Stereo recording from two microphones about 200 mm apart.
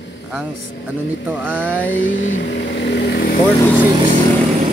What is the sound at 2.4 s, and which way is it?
Speech, 60° left (ahead or behind).